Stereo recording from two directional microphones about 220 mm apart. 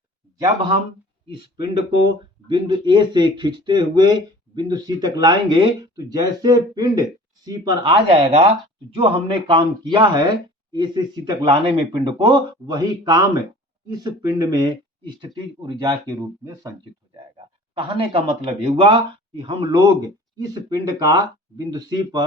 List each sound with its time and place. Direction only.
2.5 s speech: 20° right (ahead or behind)
17.3 s a sound: 25° right (ahead or behind)
18.6 s speech: 25° right (ahead or behind)